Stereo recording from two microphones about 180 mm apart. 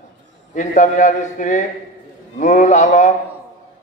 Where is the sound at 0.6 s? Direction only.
45° left (ahead or behind).